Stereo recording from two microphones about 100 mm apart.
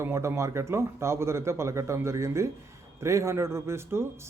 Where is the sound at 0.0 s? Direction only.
25° right (ahead or behind).